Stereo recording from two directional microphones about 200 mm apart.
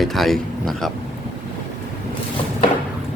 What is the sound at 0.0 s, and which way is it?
Speech, centre (ahead or behind).